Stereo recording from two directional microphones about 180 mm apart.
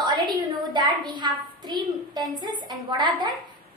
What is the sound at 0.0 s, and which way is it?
A woman's voice, 25° right (ahead or behind).